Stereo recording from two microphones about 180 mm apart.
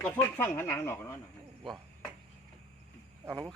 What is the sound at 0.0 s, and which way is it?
Speech, 10° left (ahead or behind).